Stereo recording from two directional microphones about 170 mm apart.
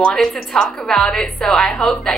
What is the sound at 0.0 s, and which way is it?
A woman's voice, 5° left (ahead or behind).